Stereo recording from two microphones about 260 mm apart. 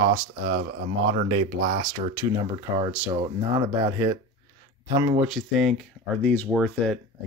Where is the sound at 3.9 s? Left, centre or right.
Centre.